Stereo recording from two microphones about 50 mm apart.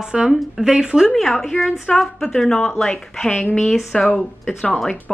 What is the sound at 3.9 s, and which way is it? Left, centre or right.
Speech, centre.